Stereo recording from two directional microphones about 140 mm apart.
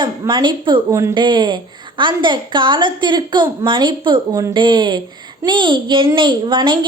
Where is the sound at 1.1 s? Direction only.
35° right (ahead or behind).